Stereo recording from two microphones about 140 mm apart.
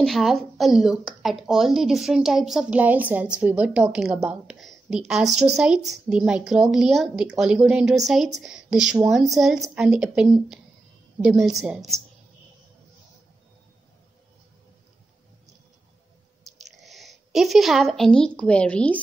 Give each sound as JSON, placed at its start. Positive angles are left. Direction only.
{"t": 0.0, "sound": "a woman's voice", "side_deg": 0}
{"t": 16.7, "sound": "a woman's voice", "side_deg": 0}